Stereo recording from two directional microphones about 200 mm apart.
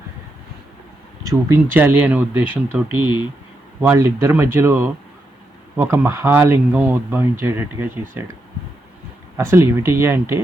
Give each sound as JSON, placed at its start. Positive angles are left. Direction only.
{"t": 1.2, "sound": "speech", "side_deg": -15}
{"t": 9.4, "sound": "speech", "side_deg": -15}